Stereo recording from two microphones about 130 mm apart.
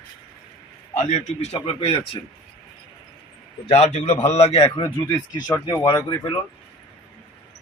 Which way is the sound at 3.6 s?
50° left (ahead or behind).